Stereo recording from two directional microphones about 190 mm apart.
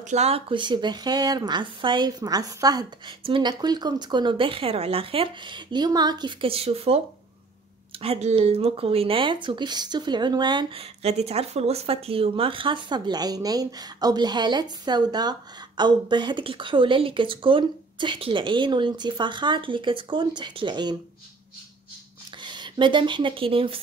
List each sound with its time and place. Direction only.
0.1 s speech: 35° right (ahead or behind)
8.0 s speech: 35° right (ahead or behind)
22.4 s speech: 25° right (ahead or behind)